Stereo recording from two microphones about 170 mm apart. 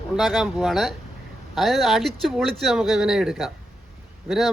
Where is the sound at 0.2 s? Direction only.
Centre (ahead or behind).